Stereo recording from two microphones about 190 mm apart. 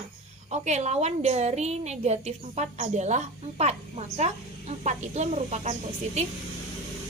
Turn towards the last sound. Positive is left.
turn(degrees=-35)  # may be behind; listen again after turning